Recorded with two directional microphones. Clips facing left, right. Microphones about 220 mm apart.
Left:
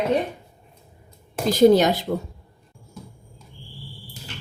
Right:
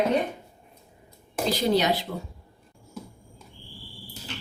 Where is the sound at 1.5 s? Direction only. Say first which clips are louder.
Left 9 dB; 45° left (ahead or behind).